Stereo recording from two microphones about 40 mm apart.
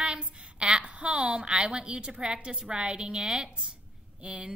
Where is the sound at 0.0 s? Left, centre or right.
Right.